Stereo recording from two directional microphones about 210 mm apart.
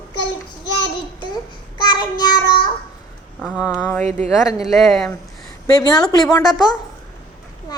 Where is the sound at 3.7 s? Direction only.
10° left (ahead or behind).